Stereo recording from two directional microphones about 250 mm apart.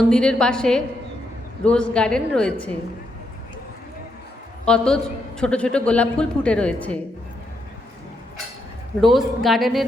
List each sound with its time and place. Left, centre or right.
0.1 s a woman's voice: centre
4.6 s a woman's voice: centre
9.0 s a woman's voice: centre